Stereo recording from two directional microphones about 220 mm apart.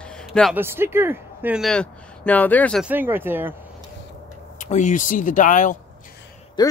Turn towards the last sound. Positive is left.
turn(degrees=20)  # may be behind; listen again after turning